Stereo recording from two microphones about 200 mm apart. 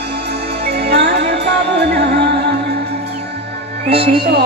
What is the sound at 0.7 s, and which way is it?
Music, 55° right (ahead or behind).